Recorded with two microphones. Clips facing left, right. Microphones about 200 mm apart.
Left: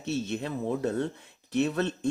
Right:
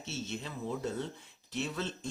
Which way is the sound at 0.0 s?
60° left (ahead or behind).